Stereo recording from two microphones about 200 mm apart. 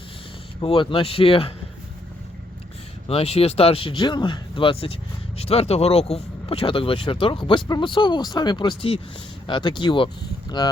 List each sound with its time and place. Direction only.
0.6 s speech: 25° left (ahead or behind)
3.1 s speech: 30° left (ahead or behind)